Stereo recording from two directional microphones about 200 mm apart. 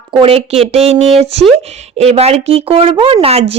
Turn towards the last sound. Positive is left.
turn(degrees=-30)  # may be behind; listen again after turning